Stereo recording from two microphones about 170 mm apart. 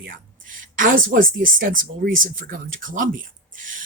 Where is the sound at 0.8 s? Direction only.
55° right (ahead or behind).